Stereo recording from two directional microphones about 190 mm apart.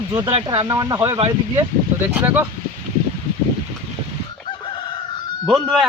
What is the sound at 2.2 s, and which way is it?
Speech, 10° right (ahead or behind).